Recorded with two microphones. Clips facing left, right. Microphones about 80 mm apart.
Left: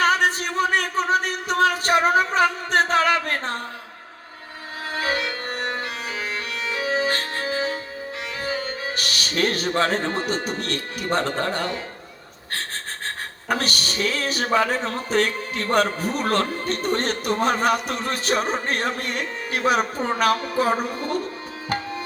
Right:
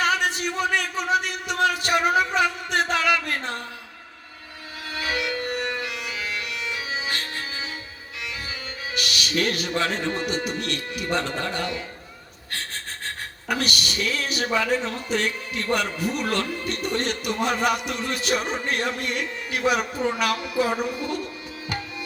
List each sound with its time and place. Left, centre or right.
0.0 s music: left
4.9 s music: left
8.4 s speech: left
13.5 s speech: left